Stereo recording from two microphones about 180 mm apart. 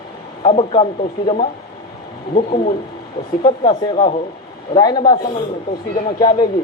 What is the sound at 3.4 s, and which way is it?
Speech, 25° left (ahead or behind).